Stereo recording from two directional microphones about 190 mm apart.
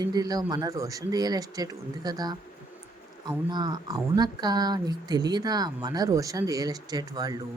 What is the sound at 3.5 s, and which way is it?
Speech, 20° right (ahead or behind).